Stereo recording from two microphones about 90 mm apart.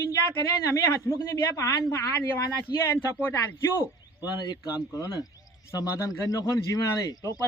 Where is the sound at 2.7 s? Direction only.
45° left (ahead or behind).